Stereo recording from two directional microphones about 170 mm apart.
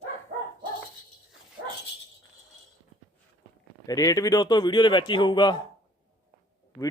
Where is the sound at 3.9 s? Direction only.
20° left (ahead or behind).